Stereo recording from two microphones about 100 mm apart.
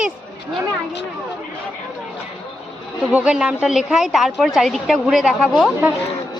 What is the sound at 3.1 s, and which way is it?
A woman's voice, 10° right (ahead or behind).